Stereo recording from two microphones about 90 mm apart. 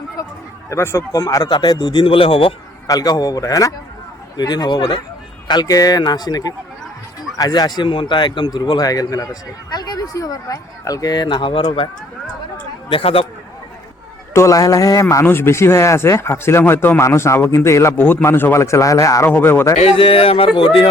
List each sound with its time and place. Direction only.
0.7 s a man's voice: 30° left (ahead or behind); by 2.5 s 90° left
2.8 s a man's voice: 45° left (ahead or behind)
4.4 s a man's voice: 50° left (ahead or behind)
8.8 s a man's voice: 45° left (ahead or behind); by 11.9 s 75° left (ahead or behind)
12.9 s speech: 90° left
14.3 s a man's voice: 35° left (ahead or behind)
15.2 s speech: 25° left (ahead or behind)
19.3 s speech: 25° left (ahead or behind)
20.0 s speech: 85° left
20.6 s speech: 70° left (ahead or behind)